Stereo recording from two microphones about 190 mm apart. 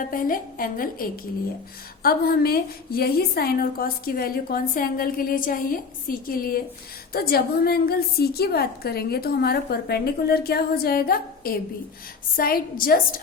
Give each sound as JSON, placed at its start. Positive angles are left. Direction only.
{"t": 0.0, "sound": "a woman's voice", "side_deg": 45}